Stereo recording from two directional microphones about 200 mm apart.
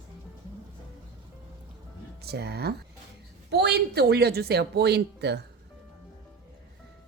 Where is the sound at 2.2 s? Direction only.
55° right (ahead or behind).